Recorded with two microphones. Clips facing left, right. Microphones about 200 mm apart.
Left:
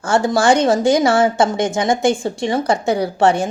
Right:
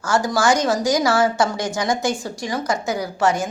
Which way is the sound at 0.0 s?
30° left (ahead or behind).